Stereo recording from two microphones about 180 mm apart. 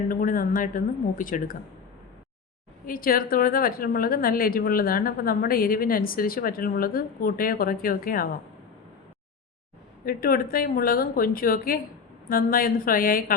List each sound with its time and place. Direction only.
0.1 s a woman's voice: 50° left (ahead or behind)
2.8 s a woman's voice: 50° left (ahead or behind)
10.1 s a woman's voice: 55° left (ahead or behind)